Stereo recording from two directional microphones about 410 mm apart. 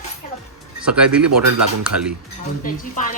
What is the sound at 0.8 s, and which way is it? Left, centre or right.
Speech, centre.